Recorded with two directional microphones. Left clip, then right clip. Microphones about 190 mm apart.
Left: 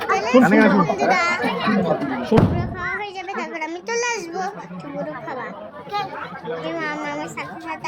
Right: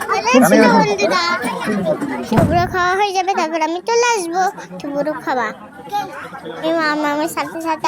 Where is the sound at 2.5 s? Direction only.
45° right (ahead or behind); by 4.5 s 30° right (ahead or behind).